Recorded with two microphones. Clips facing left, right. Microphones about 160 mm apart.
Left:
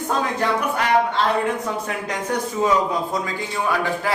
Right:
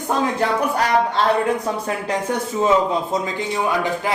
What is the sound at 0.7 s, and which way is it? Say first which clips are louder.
Speech: right 1 dB; 35° right (ahead or behind).